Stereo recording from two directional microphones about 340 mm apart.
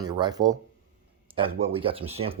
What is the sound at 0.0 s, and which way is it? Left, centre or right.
Speech, centre.